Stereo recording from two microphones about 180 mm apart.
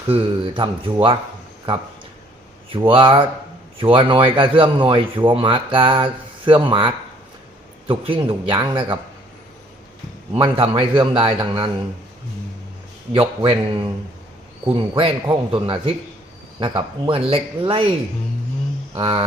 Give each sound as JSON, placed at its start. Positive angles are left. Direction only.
{"t": 0.1, "sound": "speech", "side_deg": -30}
{"t": 2.7, "sound": "speech", "side_deg": -30}
{"t": 10.3, "sound": "speech", "side_deg": -30}
{"t": 13.1, "sound": "speech", "side_deg": -30}
{"t": 18.9, "sound": "speech", "side_deg": -30}